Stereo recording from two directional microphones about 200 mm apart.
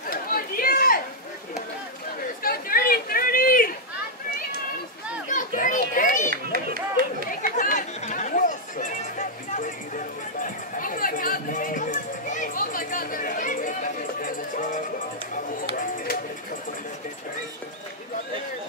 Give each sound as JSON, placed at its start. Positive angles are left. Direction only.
{"t": 0.1, "sound": "chatter", "side_deg": 45}
{"t": 2.4, "sound": "chatter", "side_deg": 45}
{"t": 5.3, "sound": "children playing", "side_deg": 40}
{"t": 6.3, "sound": "a sound", "side_deg": -45}
{"t": 7.2, "sound": "chatter", "side_deg": 45}
{"t": 14.2, "sound": "music", "side_deg": 45}